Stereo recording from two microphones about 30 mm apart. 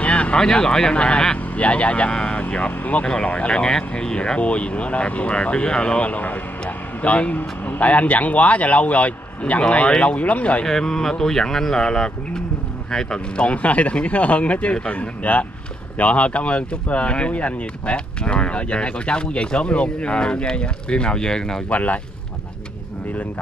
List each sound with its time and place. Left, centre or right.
0.0 s a sound: left
0.4 s speech: left
0.9 s speech: left
2.8 s speech: left
3.3 s speech: left
4.4 s speech: left
5.9 s a man's voice: left
6.6 s a man's voice: left
10.7 s speech: centre
13.4 s speech: left
21.6 s a man's voice: left